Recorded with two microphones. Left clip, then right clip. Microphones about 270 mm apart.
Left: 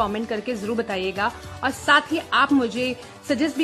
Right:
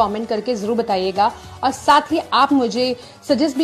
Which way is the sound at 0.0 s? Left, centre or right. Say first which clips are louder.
Right 6 dB; left.